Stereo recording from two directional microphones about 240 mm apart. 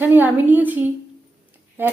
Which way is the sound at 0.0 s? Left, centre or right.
Centre.